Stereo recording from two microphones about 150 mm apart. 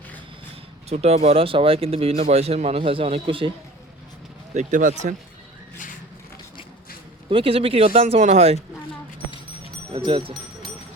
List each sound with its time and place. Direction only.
0.9 s speech: 45° right (ahead or behind)
4.5 s speech: 55° right (ahead or behind)
7.3 s speech: 35° right (ahead or behind)
8.0 s speech: 50° right (ahead or behind)
9.9 s speech: 35° right (ahead or behind)